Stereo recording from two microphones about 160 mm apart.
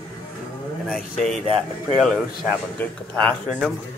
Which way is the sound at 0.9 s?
Centre (ahead or behind).